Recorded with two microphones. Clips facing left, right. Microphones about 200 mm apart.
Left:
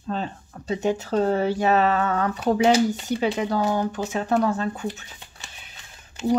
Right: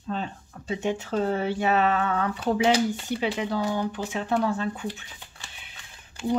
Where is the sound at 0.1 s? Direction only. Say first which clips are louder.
Left 3 dB; 40° left (ahead or behind).